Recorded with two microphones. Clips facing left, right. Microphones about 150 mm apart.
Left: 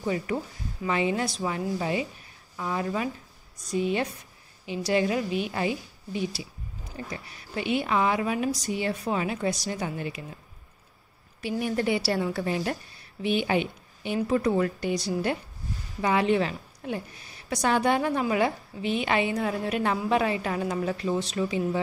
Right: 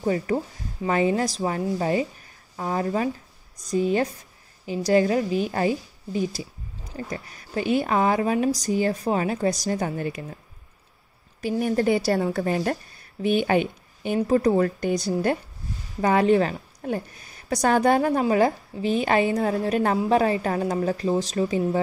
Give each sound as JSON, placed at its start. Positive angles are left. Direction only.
{"t": 0.0, "sound": "a woman's voice", "side_deg": -40}
{"t": 11.6, "sound": "a woman's voice", "side_deg": -40}
{"t": 16.0, "sound": "a woman's voice", "side_deg": -45}